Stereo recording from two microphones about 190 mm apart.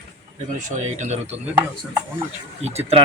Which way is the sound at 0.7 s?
35° right (ahead or behind).